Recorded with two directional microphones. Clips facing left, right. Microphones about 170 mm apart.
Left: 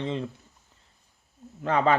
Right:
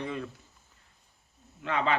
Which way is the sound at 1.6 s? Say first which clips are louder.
Left 6 dB; 40° left (ahead or behind).